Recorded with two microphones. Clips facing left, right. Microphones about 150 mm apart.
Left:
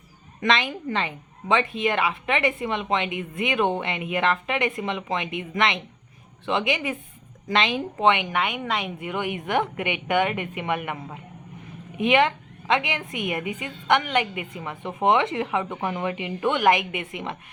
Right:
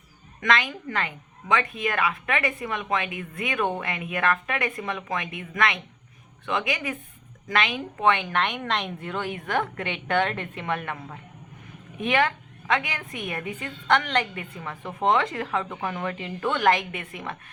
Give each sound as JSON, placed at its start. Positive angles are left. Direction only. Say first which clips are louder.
{"t": 0.3, "sound": "a woman's voice", "louder": "left 1 dB", "side_deg": 25}
{"t": 8.1, "sound": "a woman's voice", "louder": "left 1 dB", "side_deg": 10}